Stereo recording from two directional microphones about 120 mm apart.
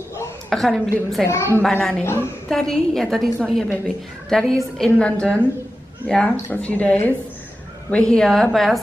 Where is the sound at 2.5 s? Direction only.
5° left (ahead or behind).